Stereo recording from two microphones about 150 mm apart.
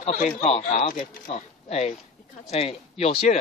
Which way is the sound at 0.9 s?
65° left (ahead or behind).